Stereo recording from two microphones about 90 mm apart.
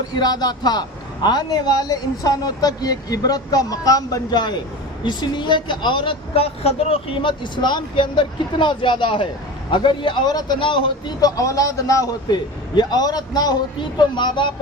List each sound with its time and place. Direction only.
0.2 s a man's voice: 50° left (ahead or behind)
10.6 s a man's voice: 65° left (ahead or behind); by 12.1 s 35° left (ahead or behind)
12.3 s a man's voice: 50° left (ahead or behind)